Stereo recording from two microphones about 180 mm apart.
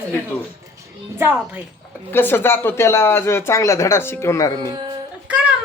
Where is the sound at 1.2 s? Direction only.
10° right (ahead or behind).